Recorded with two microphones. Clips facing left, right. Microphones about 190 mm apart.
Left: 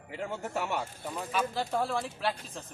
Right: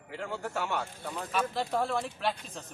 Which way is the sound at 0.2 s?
20° left (ahead or behind).